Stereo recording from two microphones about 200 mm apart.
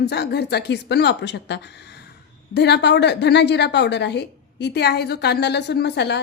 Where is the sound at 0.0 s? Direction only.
55° left (ahead or behind).